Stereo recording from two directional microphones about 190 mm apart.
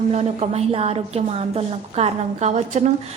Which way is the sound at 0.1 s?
35° right (ahead or behind).